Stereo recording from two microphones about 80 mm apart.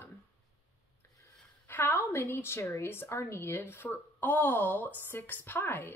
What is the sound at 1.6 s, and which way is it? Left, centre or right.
A woman's voice, left.